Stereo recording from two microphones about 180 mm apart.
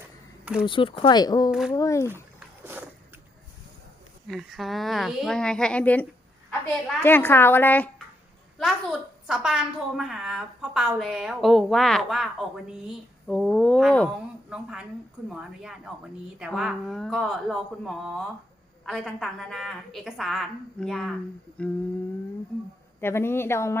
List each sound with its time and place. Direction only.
0.0 s a sound: 5° right (ahead or behind)
0.6 s speech: 30° left (ahead or behind)
1.5 s a woman's voice: 5° right (ahead or behind)
1.7 s speech: 15° left (ahead or behind)
4.3 s a woman's voice: centre (ahead or behind)
23.0 s speech: 15° left (ahead or behind)